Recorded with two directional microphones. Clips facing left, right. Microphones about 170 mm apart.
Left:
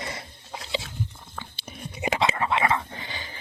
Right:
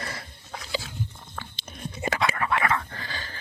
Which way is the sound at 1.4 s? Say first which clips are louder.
Right 1 dB; 10° left (ahead or behind).